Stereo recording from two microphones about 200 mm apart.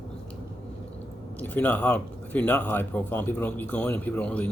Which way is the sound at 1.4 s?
5° left (ahead or behind).